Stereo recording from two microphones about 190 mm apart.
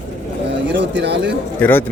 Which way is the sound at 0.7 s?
65° right (ahead or behind).